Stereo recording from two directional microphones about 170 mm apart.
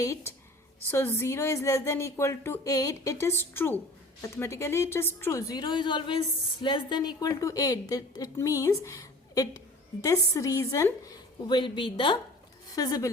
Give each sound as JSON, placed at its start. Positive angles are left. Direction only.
{"t": 0.0, "sound": "a woman's voice", "side_deg": 20}